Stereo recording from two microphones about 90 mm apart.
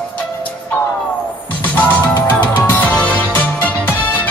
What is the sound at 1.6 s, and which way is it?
Music, 15° left (ahead or behind).